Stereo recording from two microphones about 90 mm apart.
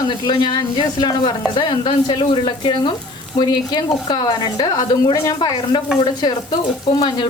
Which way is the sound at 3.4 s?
50° left (ahead or behind).